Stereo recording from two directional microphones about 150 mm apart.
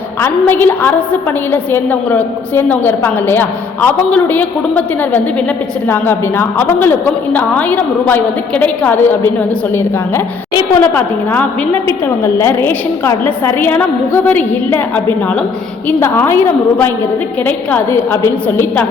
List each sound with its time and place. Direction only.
0.2 s a woman's voice: 15° left (ahead or behind)
10.8 s a woman's voice: 15° left (ahead or behind)